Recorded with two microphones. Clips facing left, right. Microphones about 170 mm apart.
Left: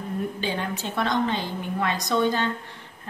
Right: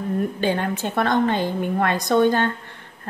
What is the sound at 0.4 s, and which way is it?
A woman's voice, 55° right (ahead or behind).